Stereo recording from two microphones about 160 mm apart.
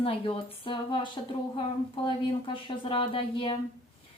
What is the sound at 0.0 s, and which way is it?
A woman's voice, 35° left (ahead or behind).